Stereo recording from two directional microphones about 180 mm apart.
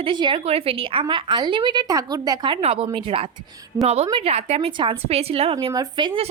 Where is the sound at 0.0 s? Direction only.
25° right (ahead or behind).